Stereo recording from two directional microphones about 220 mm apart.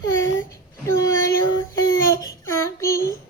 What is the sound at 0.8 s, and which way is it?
Child singing, 15° left (ahead or behind).